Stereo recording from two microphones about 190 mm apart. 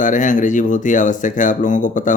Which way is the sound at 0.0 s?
40° left (ahead or behind).